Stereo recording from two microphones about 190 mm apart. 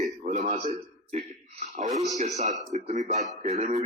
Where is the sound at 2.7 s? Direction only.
40° right (ahead or behind).